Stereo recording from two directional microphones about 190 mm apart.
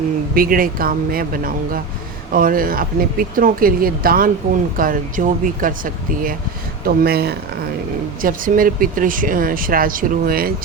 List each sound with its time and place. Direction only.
0.3 s speech: 50° right (ahead or behind)